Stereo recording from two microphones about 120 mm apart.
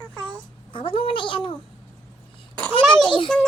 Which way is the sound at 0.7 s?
45° left (ahead or behind).